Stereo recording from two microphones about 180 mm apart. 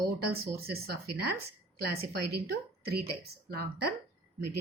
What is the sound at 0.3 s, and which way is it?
Speech, 60° right (ahead or behind).